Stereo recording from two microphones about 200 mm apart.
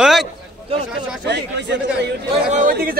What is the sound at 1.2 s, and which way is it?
Speech, 55° right (ahead or behind).